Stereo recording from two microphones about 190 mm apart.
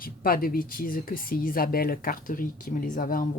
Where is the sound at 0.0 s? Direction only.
50° left (ahead or behind).